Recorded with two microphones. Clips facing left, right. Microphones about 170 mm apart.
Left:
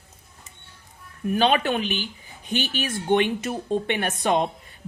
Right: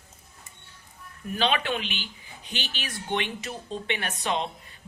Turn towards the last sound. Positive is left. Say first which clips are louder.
# left 7 dB
turn(degrees=50)  # may be behind; listen again after turning